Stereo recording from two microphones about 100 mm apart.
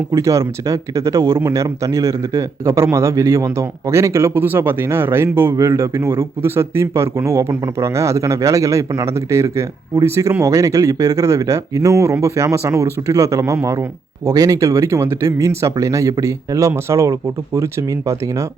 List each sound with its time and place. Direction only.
0.1 s a man's voice: 30° right (ahead or behind)